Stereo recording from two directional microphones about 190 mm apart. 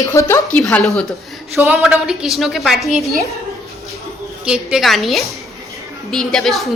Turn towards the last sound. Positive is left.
turn(degrees=0)  # may be behind; listen again after turning